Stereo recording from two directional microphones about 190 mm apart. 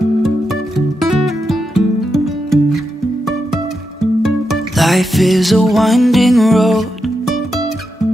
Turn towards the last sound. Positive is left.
turn(degrees=0)  # may be behind; listen again after turning